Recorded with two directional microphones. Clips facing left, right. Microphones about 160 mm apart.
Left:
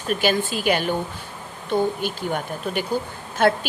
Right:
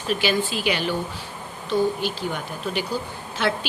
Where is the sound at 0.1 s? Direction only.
50° left (ahead or behind).